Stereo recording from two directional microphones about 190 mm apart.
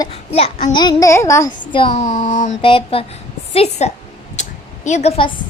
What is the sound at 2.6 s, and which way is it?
Speech, 30° left (ahead or behind).